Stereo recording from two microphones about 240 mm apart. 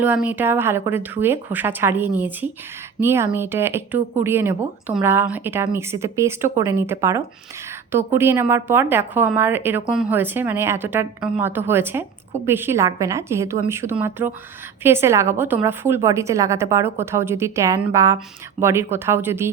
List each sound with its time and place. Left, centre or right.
0.0 s speech: centre